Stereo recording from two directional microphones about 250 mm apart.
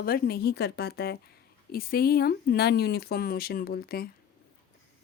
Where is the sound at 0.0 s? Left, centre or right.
Left.